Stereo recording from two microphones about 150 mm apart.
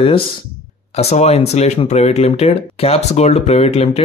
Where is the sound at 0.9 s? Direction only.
45° left (ahead or behind).